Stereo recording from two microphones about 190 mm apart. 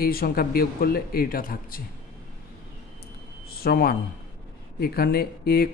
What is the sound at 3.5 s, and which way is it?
A man's voice, 55° left (ahead or behind).